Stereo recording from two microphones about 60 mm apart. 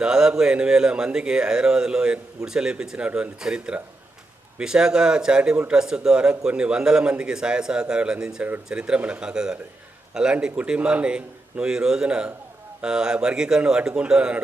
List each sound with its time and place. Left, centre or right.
0.0 s speech: centre